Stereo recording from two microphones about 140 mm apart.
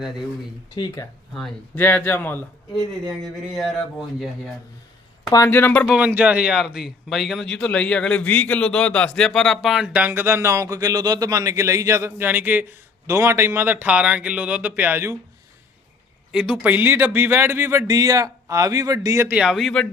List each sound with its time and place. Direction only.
1.4 s speech: 5° left (ahead or behind)
3.1 s speech: centre (ahead or behind)
5.3 s speech: 20° left (ahead or behind)
6.1 s a man's voice: 10° right (ahead or behind)
16.3 s a man's voice: 5° right (ahead or behind)
19.4 s speech: 5° right (ahead or behind)